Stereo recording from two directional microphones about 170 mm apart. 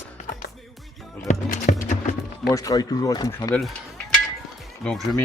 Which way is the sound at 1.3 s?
50° left (ahead or behind).